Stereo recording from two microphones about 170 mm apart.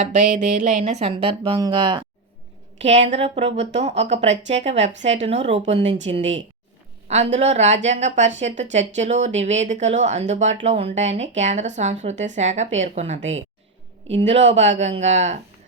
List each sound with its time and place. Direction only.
0.0 s speech: 45° right (ahead or behind); by 2.0 s 30° right (ahead or behind)
2.8 s speech: 40° right (ahead or behind)
7.1 s speech: 40° right (ahead or behind)